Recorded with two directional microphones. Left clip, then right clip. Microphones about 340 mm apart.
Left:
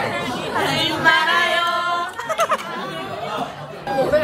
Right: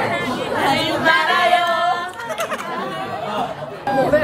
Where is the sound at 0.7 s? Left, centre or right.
Centre.